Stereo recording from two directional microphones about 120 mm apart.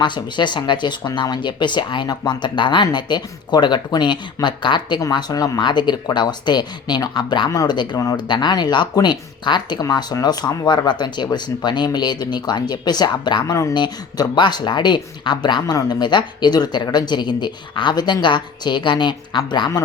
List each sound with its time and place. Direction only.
0.0 s speech: 40° left (ahead or behind)